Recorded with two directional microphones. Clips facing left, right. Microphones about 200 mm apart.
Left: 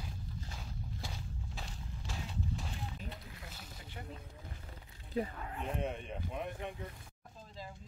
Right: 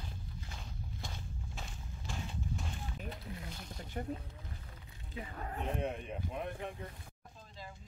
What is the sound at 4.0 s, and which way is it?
Mechanisms, 40° right (ahead or behind).